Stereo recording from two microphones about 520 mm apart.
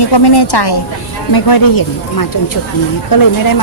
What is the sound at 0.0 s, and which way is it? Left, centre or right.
A woman's voice, left.